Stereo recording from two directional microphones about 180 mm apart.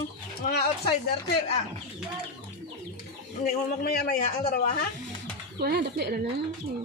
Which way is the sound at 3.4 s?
60° left (ahead or behind).